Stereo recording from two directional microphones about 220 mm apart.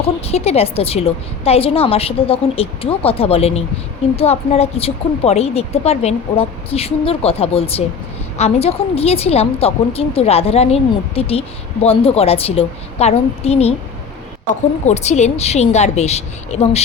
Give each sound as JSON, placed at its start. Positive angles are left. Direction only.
{"t": 0.0, "sound": "a woman's voice", "side_deg": 30}
{"t": 14.8, "sound": "a woman's voice", "side_deg": 30}